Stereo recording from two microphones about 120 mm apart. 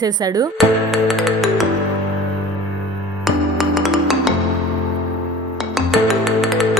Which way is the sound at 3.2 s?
Centre (ahead or behind).